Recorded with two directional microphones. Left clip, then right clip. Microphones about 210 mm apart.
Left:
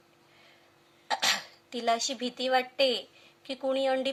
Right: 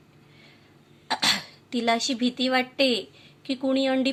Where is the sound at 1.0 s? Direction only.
15° left (ahead or behind).